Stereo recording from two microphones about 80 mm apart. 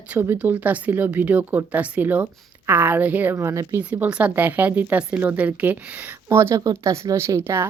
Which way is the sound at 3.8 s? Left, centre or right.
Centre.